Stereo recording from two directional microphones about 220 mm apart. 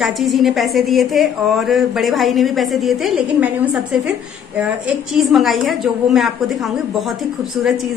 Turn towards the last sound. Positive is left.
turn(degrees=0)  # may be behind; listen again after turning